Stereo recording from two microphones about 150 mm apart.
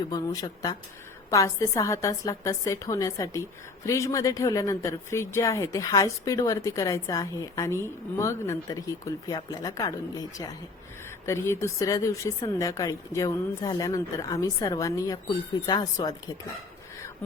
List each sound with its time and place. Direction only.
0.1 s speech: 25° left (ahead or behind)